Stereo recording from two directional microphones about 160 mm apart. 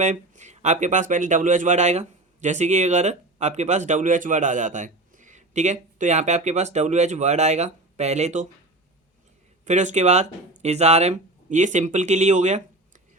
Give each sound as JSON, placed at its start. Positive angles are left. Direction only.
{"t": 0.0, "sound": "speech", "side_deg": -50}
{"t": 9.6, "sound": "speech", "side_deg": -45}